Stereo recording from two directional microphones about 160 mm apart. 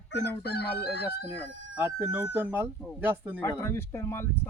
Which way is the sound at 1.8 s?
10° right (ahead or behind).